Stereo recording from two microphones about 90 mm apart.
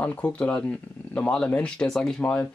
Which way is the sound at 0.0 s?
15° left (ahead or behind).